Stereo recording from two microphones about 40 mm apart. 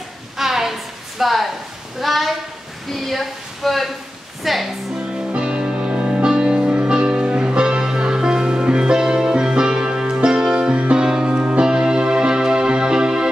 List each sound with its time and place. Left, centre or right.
0.4 s a sound: centre
2.0 s a woman's voice: centre
5.3 s music: right